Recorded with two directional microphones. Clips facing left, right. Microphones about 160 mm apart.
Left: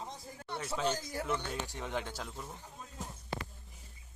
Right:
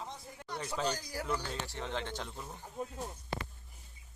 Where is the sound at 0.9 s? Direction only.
25° left (ahead or behind); by 2.3 s 10° left (ahead or behind).